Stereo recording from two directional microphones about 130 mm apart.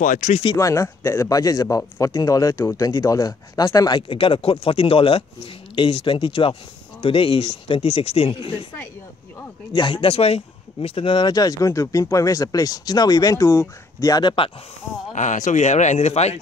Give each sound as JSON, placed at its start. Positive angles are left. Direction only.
{"t": 0.0, "sound": "speech", "side_deg": 90}
{"t": 0.6, "sound": "speech", "side_deg": 25}
{"t": 4.1, "sound": "speech", "side_deg": 45}
{"t": 9.8, "sound": "speech", "side_deg": 40}
{"t": 15.1, "sound": "speech", "side_deg": 70}